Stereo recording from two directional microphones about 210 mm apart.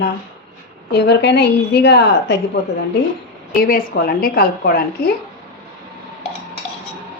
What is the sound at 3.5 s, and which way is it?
Speech, 40° left (ahead or behind).